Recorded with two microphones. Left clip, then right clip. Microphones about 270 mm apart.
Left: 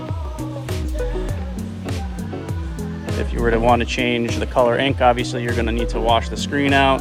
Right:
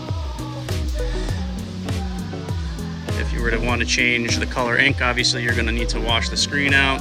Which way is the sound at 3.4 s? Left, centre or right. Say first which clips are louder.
Left 6 dB; centre.